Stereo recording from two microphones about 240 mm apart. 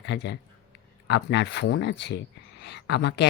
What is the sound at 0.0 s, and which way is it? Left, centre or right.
Speech, left.